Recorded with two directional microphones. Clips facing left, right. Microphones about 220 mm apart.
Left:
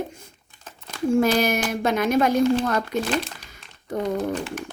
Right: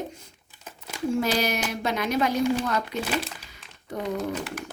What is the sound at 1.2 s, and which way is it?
Speech, 50° left (ahead or behind).